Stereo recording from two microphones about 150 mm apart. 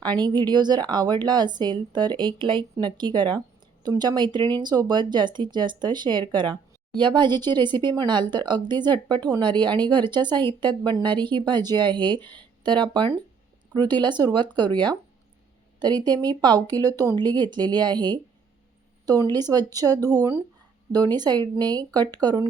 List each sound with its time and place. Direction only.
0.0 s speech: 30° right (ahead or behind)
19.3 s speech: 25° right (ahead or behind)